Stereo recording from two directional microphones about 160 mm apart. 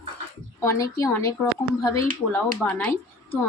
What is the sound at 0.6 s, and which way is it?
A woman's voice, 20° left (ahead or behind).